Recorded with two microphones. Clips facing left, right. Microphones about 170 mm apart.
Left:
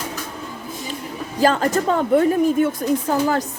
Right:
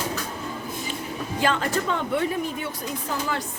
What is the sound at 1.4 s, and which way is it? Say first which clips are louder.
A woman's voice: left 7 dB; 40° left (ahead or behind).